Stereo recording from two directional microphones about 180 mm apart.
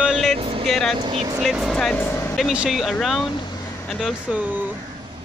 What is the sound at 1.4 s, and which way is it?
Speech, centre (ahead or behind).